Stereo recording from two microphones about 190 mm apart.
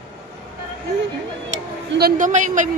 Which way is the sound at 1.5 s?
60° right (ahead or behind).